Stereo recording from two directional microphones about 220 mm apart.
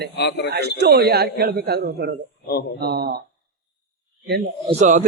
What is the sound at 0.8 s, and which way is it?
A man's voice, 45° right (ahead or behind).